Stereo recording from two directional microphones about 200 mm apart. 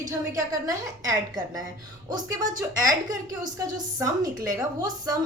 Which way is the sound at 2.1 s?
20° right (ahead or behind).